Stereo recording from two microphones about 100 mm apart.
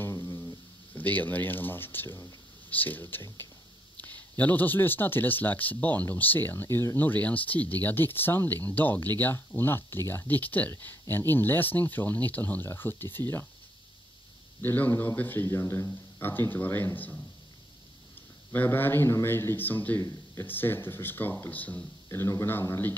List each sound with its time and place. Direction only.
0.0 s a sound: 25° left (ahead or behind)
0.9 s speech: 15° left (ahead or behind)
14.6 s speech: 20° left (ahead or behind)
18.5 s speech: 20° left (ahead or behind)
20.0 s speech: 30° left (ahead or behind)